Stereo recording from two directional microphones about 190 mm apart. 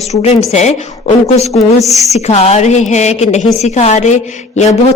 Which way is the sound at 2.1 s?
35° left (ahead or behind).